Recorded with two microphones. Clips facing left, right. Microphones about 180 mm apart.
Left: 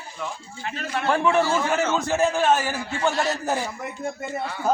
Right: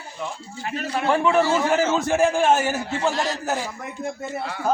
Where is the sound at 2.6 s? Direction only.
25° right (ahead or behind).